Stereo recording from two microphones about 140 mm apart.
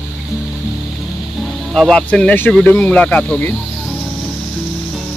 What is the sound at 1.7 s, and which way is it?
Speech, 5° left (ahead or behind).